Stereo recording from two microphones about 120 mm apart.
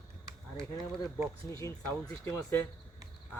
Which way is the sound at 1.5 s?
25° left (ahead or behind).